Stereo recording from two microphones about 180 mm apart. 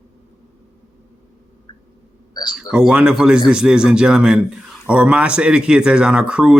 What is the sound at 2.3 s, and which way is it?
Speech, 25° left (ahead or behind).